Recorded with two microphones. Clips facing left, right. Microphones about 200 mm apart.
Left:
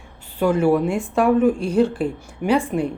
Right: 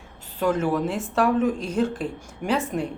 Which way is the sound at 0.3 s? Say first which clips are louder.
Left 5 dB; 10° left (ahead or behind).